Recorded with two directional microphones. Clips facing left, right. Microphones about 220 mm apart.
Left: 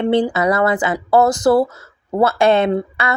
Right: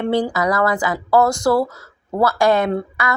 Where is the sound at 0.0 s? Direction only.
20° left (ahead or behind).